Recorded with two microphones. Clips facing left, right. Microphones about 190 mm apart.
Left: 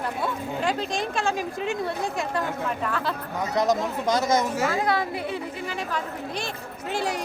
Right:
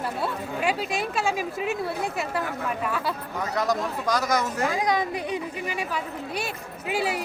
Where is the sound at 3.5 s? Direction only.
20° left (ahead or behind).